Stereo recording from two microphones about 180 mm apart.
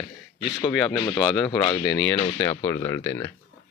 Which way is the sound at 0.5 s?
20° left (ahead or behind).